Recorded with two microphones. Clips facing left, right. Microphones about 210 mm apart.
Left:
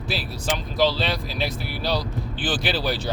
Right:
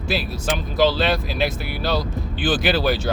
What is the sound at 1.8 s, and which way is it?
Speech, 55° right (ahead or behind).